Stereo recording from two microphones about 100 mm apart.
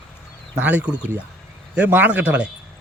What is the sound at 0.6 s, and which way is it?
A man's voice, 15° right (ahead or behind).